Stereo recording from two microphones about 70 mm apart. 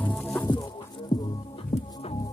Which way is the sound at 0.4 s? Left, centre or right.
Left.